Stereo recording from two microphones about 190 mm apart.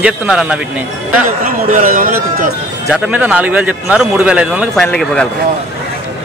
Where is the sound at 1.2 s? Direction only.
45° right (ahead or behind).